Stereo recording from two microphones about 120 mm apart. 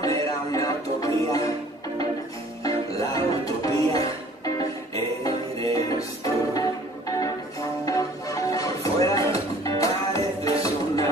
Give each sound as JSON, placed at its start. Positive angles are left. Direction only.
{"t": 0.0, "sound": "music", "side_deg": 30}
{"t": 2.6, "sound": "music", "side_deg": 30}
{"t": 7.8, "sound": "music", "side_deg": 30}